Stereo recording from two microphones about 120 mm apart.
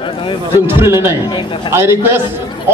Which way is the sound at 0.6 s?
20° right (ahead or behind).